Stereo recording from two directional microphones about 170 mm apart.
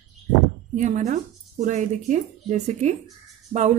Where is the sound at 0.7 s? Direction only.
45° right (ahead or behind).